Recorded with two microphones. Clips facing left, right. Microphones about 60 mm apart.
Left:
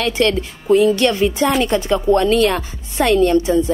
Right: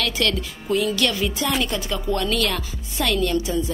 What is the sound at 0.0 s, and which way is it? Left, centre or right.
A woman's voice, left.